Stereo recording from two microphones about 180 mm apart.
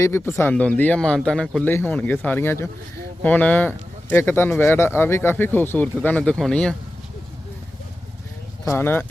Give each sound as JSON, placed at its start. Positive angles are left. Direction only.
{"t": 0.0, "sound": "speech", "side_deg": 15}
{"t": 8.6, "sound": "speech", "side_deg": 15}